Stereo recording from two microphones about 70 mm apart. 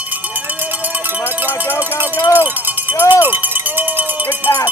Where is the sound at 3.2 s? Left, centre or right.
Right.